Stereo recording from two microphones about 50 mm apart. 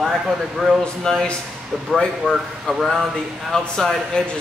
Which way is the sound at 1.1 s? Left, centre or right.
Centre.